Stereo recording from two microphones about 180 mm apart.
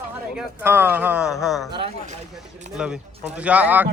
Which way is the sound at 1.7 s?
30° right (ahead or behind).